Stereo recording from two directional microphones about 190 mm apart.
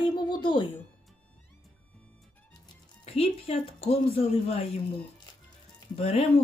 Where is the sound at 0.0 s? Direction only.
25° left (ahead or behind).